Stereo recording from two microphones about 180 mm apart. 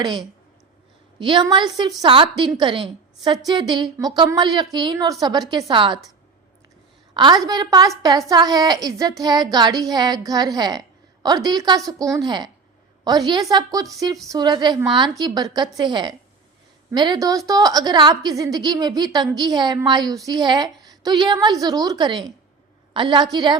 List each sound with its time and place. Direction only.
0.0 s a woman's voice: 25° right (ahead or behind)
7.1 s a woman's voice: 25° right (ahead or behind)